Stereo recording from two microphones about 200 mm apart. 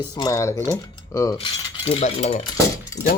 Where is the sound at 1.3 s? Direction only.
30° left (ahead or behind).